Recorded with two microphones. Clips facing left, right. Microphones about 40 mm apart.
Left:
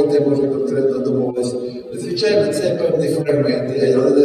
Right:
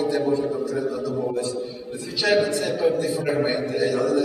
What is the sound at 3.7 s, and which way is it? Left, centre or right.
Speech, right.